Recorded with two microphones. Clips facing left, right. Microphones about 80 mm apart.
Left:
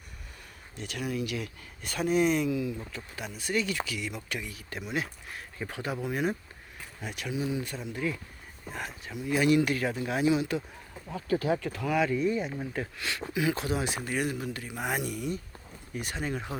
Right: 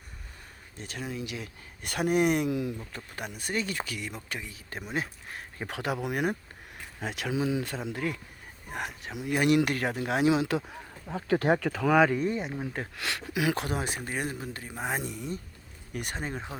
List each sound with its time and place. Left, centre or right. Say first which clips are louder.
0.8 s speech: left 3 dB; right
1.8 s speech: right 1 dB; right
2.9 s speech: right 1 dB; right
5.6 s speech: right 2 dB; right
7.0 s speech: right 3 dB; right
8.7 s speech: right 2 dB; right
11.3 s speech: right 3 dB; right
12.0 s speech: right 1 dB; right
12.4 s speech: left 1 dB; right
13.0 s speech: right 2 dB; right
15.9 s speech: right 1 dB; right
16.2 s speech: left 2 dB; right